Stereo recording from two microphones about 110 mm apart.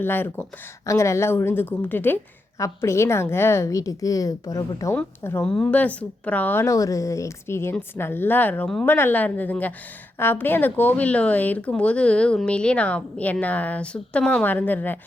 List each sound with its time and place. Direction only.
0.0 s a woman's voice: 20° left (ahead or behind)
5.5 s a woman's voice: 10° left (ahead or behind)